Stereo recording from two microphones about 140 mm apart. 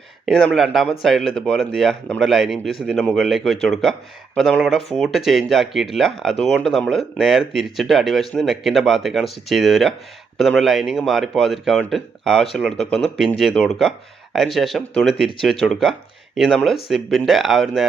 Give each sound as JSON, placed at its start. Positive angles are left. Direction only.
{"t": 0.3, "sound": "speech", "side_deg": 0}